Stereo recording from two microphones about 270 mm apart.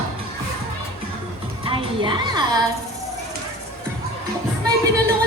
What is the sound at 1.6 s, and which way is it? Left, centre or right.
Music, centre.